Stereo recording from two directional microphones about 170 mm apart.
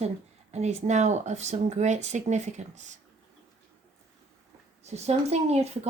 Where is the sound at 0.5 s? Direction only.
40° right (ahead or behind).